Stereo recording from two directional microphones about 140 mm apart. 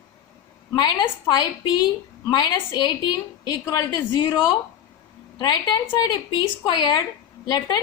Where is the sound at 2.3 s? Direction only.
30° left (ahead or behind).